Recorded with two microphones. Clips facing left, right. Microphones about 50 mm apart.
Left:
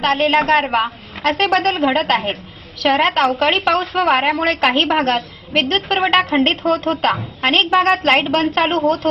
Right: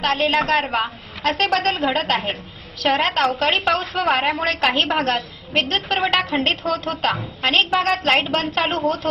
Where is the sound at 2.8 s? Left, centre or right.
Left.